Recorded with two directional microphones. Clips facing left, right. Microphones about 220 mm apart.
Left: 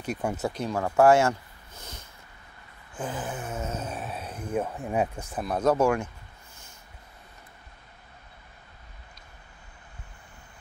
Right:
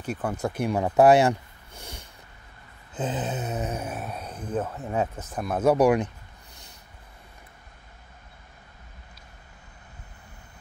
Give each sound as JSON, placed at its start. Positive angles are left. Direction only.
{"t": 0.2, "sound": "speech", "side_deg": 10}
{"t": 0.6, "sound": "speech", "side_deg": -15}
{"t": 2.9, "sound": "a sound", "side_deg": -20}
{"t": 3.9, "sound": "speech", "side_deg": 0}
{"t": 5.4, "sound": "speech", "side_deg": -5}